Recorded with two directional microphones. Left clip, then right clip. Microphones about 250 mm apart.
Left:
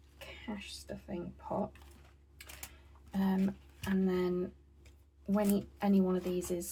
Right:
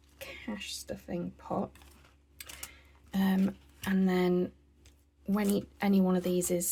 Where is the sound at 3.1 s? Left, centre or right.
Right.